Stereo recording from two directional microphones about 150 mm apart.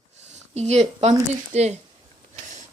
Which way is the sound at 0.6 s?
45° right (ahead or behind).